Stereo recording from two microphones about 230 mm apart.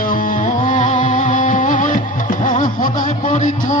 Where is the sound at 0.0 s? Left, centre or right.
Left.